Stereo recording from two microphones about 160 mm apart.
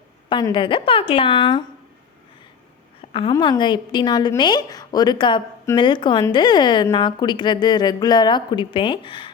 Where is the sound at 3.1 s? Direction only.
30° left (ahead or behind).